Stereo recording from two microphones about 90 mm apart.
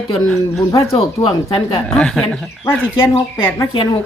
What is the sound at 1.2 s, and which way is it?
Speech, 60° left (ahead or behind).